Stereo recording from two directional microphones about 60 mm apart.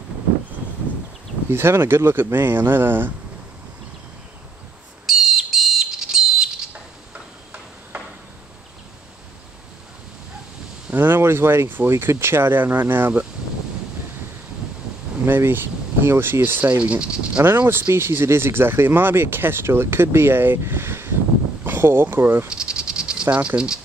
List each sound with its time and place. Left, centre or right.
1.5 s speech: right
5.0 s bird: centre
10.9 s speech: right
15.2 s speech: right; by 17.4 s centre
17.4 s speech: right
21.6 s a sound: right
22.0 s speech: right
22.5 s snake: centre
23.3 s speech: right